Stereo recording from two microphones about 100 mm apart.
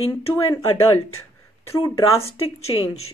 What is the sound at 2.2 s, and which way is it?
Speech, 85° left.